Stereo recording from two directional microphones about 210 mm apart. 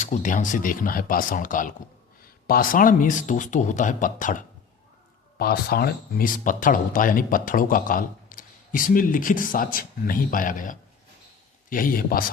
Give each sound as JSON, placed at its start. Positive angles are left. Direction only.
{"t": 0.0, "sound": "a man's voice", "side_deg": 35}